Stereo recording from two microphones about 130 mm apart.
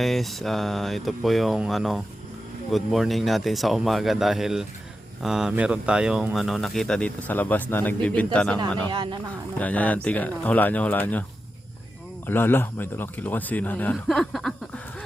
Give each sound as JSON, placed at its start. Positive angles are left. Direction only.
{"t": 0.0, "sound": "speech", "side_deg": 0}
{"t": 8.9, "sound": "speech", "side_deg": -40}
{"t": 9.6, "sound": "speech", "side_deg": 10}
{"t": 13.9, "sound": "a sound", "side_deg": 0}